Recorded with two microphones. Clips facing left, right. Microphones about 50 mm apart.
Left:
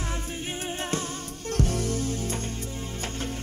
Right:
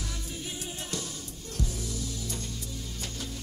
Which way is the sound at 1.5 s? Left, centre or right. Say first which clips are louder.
Left 9 dB; left.